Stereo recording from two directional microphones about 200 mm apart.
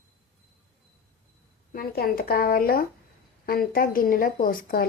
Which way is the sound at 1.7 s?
50° left (ahead or behind).